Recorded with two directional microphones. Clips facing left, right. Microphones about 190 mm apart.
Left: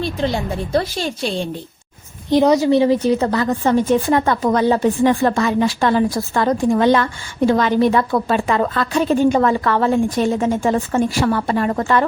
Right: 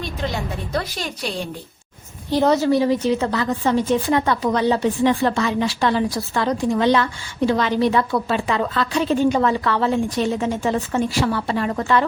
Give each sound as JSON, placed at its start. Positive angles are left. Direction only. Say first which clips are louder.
{"t": 0.0, "sound": "a woman's voice", "louder": "left 5 dB", "side_deg": 30}
{"t": 2.3, "sound": "a woman's voice", "louder": "left 4 dB", "side_deg": 15}
{"t": 3.1, "sound": "a woman's voice", "louder": "left 3 dB", "side_deg": 40}